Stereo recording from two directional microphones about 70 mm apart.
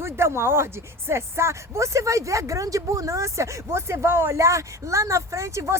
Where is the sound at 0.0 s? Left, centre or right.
Right.